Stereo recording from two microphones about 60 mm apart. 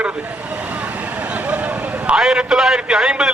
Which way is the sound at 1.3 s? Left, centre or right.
Right.